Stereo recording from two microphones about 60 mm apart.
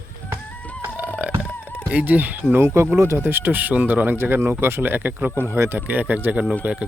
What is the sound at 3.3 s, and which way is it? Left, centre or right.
Speech, right.